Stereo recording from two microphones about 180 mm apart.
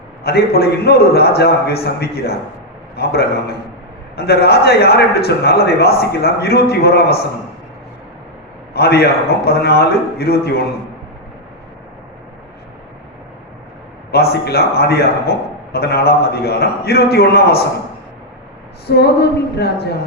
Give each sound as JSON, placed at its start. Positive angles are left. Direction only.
{"t": 0.3, "sound": "a man's voice", "side_deg": 60}
{"t": 8.7, "sound": "a man's voice", "side_deg": 60}
{"t": 14.4, "sound": "a man's voice", "side_deg": 60}
{"t": 18.9, "sound": "a man's voice", "side_deg": 60}